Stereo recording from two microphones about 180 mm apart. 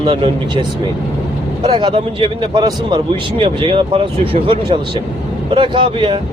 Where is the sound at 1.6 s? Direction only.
30° right (ahead or behind).